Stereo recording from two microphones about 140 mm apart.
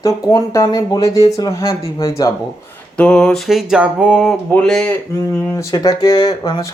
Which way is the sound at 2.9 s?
5° left (ahead or behind).